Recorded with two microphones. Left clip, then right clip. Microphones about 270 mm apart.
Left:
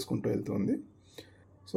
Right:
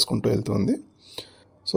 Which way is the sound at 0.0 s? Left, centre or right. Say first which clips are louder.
Right 9 dB; right.